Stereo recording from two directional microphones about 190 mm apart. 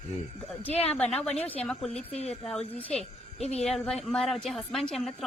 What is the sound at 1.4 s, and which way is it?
A woman's voice, 5° left (ahead or behind).